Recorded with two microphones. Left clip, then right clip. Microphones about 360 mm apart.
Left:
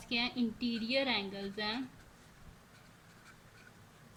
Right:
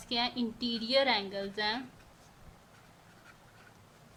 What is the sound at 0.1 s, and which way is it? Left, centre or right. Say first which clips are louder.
A woman's voice: right 2 dB; centre.